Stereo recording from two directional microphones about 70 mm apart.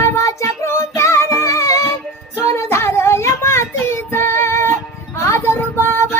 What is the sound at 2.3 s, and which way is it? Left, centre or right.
Child singing, left.